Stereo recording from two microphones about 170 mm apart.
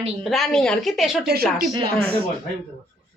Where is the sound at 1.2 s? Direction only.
65° right (ahead or behind).